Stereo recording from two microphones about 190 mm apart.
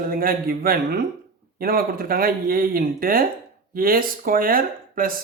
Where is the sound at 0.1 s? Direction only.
50° right (ahead or behind).